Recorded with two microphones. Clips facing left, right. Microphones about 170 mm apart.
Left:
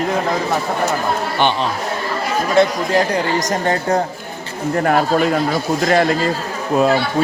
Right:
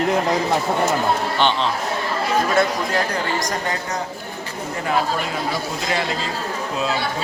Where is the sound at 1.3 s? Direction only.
10° left (ahead or behind).